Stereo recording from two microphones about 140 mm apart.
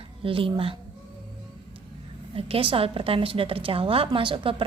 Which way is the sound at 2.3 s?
40° right (ahead or behind).